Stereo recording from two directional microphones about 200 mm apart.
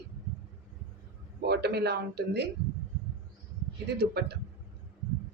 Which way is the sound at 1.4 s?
55° right (ahead or behind).